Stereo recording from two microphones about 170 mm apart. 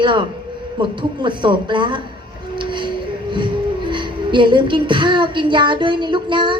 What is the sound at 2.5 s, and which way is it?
Music, 30° right (ahead or behind).